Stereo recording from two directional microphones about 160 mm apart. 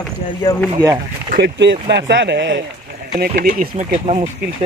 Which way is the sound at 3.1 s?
60° right (ahead or behind).